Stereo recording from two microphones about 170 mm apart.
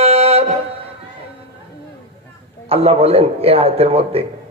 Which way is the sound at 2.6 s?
35° right (ahead or behind).